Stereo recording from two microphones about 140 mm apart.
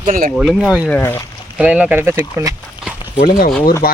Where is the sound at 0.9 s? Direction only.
15° left (ahead or behind).